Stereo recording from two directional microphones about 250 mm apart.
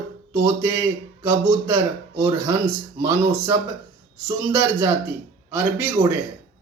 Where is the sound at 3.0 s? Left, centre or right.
Centre.